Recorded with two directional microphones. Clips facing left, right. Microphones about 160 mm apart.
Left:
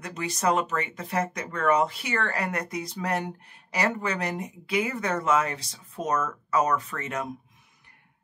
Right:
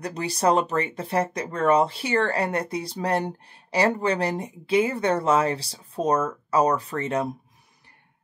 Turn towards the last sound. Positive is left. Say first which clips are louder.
# right 7 dB
turn(degrees=-30)  # may be behind; listen again after turning